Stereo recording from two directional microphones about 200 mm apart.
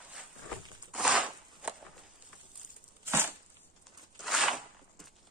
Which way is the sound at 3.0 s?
10° right (ahead or behind).